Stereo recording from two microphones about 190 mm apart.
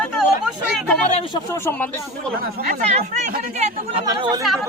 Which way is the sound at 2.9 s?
35° right (ahead or behind).